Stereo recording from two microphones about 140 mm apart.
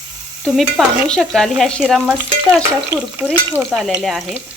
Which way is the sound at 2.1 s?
15° right (ahead or behind).